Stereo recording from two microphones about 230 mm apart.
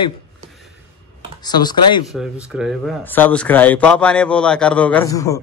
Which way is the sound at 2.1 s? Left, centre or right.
Centre.